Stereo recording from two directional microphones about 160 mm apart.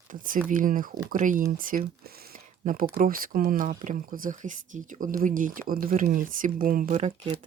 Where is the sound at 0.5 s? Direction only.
55° right (ahead or behind).